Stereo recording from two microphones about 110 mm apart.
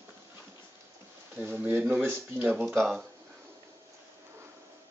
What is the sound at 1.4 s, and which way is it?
Speech, 15° right (ahead or behind).